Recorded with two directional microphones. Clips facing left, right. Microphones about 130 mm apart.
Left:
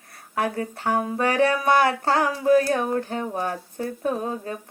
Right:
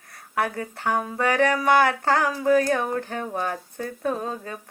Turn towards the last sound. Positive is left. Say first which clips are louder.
# left 1 dB
turn(degrees=20)  # may be behind; listen again after turning